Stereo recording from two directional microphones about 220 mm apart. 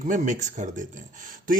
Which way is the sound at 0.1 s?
35° right (ahead or behind).